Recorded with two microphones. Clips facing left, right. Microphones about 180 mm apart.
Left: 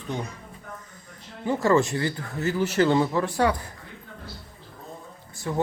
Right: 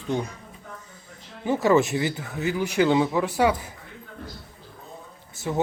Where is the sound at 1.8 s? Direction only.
20° right (ahead or behind); by 3.6 s 5° right (ahead or behind).